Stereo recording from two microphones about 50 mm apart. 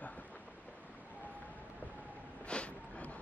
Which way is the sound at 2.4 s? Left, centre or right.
Left.